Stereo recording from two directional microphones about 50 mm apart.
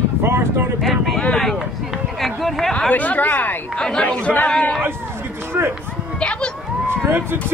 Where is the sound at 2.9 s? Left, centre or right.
Left.